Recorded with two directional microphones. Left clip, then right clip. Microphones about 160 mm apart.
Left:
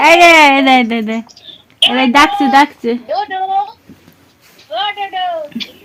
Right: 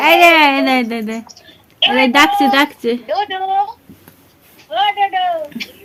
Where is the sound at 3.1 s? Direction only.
25° right (ahead or behind).